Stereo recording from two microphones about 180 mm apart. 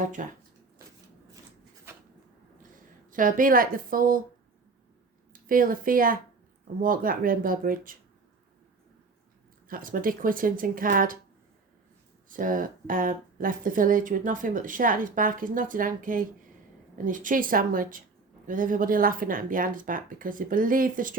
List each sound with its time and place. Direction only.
0.0 s speech: 45° right (ahead or behind)
3.1 s speech: 50° right (ahead or behind)
5.3 s speech: 50° right (ahead or behind)
9.6 s speech: 50° right (ahead or behind)
12.3 s speech: 50° right (ahead or behind)